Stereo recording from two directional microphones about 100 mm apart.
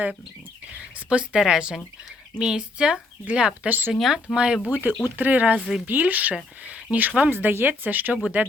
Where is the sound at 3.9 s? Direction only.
5° right (ahead or behind).